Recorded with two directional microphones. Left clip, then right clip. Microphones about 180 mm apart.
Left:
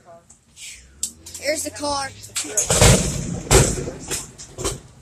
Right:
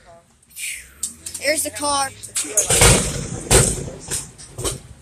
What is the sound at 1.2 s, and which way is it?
Speech, centre (ahead or behind).